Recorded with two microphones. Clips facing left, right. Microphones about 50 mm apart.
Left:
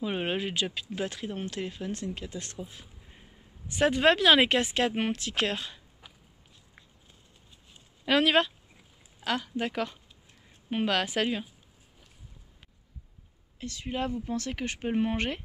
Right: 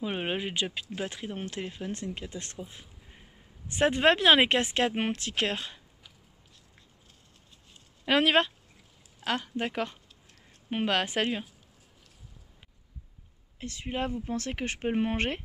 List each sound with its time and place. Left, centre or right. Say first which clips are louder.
0.0 s speech: left 1 dB; centre
1.9 s speech: left 1 dB; right
3.1 s a sound: even; centre
3.6 s speech: even; right
8.1 s speech: even; right
13.6 s speech: even; right